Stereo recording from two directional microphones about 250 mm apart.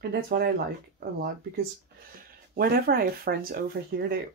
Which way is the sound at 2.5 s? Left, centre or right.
Right.